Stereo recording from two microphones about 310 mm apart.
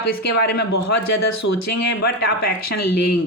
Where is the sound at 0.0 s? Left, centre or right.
Left.